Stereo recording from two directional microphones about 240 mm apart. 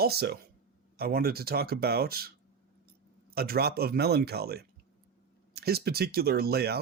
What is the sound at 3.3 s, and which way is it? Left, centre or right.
Speech, right.